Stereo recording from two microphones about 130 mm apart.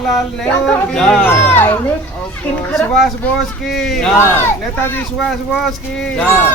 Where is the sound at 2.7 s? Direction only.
Centre (ahead or behind).